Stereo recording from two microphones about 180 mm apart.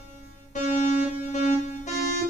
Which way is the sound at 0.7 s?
40° left (ahead or behind).